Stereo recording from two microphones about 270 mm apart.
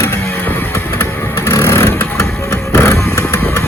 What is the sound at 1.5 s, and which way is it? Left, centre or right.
Vehicle, centre.